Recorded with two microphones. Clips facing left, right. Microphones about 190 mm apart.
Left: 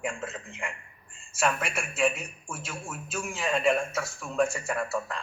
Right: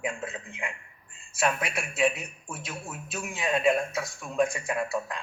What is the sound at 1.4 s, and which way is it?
A man's voice, 10° right (ahead or behind).